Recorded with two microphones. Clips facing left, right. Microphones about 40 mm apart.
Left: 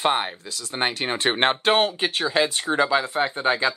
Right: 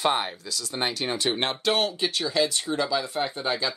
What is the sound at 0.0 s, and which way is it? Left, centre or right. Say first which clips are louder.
Speech: left 2 dB; left.